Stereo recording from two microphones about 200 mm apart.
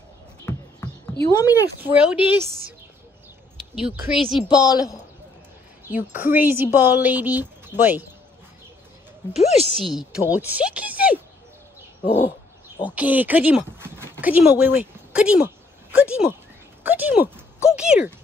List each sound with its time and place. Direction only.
1.2 s speech: 15° left (ahead or behind)
1.8 s speech: 10° right (ahead or behind)
3.7 s speech: 5° right (ahead or behind)
4.6 s speech: 20° left (ahead or behind)
5.9 s speech: 10° right (ahead or behind)
9.3 s a woman's voice: 35° left (ahead or behind)
9.8 s speech: 5° right (ahead or behind)
12.8 s speech: 10° right (ahead or behind)
13.7 s a sound: 10° right (ahead or behind)
16.8 s speech: 10° right (ahead or behind)